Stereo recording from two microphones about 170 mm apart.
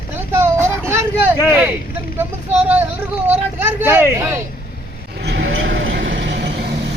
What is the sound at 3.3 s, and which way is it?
Speech, 10° right (ahead or behind).